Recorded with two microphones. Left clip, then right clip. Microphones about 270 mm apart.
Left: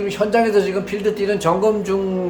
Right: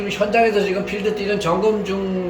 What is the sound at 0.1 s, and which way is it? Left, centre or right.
Speech, left.